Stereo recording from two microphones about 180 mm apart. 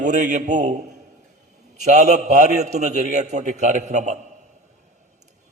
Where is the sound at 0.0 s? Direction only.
45° right (ahead or behind).